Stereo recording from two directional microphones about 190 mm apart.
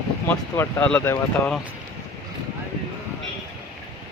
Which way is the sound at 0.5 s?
10° left (ahead or behind).